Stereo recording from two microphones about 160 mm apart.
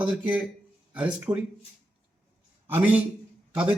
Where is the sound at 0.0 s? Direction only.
5° right (ahead or behind).